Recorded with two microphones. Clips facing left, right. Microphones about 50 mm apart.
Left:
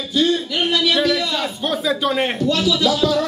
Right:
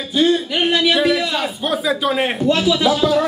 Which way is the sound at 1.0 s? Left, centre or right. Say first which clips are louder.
Right 2 dB; centre.